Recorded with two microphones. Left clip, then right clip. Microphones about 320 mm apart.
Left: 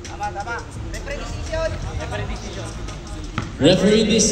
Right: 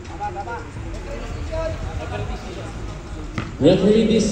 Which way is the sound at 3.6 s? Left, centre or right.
Left.